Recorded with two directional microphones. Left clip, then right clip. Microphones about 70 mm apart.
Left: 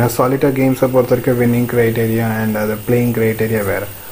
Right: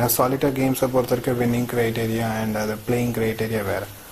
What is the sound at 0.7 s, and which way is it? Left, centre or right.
Speech, centre.